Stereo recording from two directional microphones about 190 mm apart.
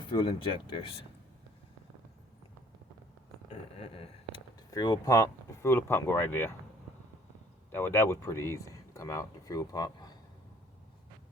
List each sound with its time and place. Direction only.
0.0 s speech: 25° left (ahead or behind)
3.5 s a sound: 30° left (ahead or behind)
4.7 s speech: 20° left (ahead or behind)
7.7 s speech: 10° left (ahead or behind)